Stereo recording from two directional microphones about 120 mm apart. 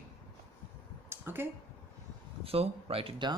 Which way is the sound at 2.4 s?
55° right (ahead or behind).